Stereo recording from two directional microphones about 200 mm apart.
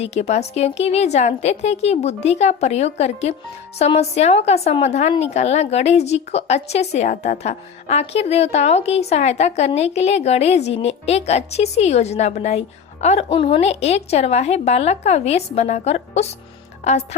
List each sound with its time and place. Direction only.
0.0 s a woman's voice: 35° left (ahead or behind)